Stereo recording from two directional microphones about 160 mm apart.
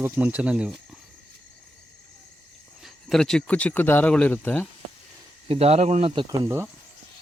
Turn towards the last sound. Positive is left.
turn(degrees=-20)  # may be behind; listen again after turning